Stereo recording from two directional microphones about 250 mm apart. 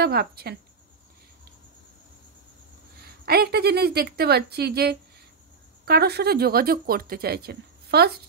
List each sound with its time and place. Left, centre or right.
0.0 s speech: right
3.3 s speech: right